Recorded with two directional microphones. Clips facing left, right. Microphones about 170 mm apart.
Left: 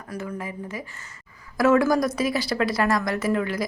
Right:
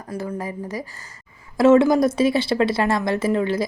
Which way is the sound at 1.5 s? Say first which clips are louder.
Right 5 dB; 25° right (ahead or behind).